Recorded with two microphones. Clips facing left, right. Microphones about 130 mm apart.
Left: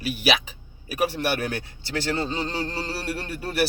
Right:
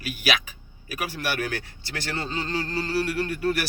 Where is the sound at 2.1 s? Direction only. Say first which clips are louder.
Left 2 dB; 30° left (ahead or behind).